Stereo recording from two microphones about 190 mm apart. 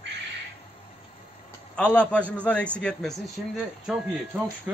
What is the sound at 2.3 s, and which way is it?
A man's voice, 5° left (ahead or behind).